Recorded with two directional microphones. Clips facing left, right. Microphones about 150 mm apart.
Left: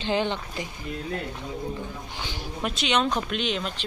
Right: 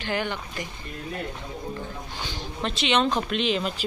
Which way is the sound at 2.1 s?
15° left (ahead or behind).